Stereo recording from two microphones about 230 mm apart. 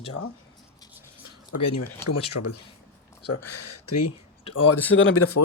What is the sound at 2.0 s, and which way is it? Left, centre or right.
Speech, left.